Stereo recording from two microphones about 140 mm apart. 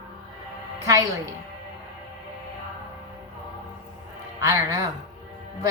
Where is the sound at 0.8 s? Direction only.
25° right (ahead or behind).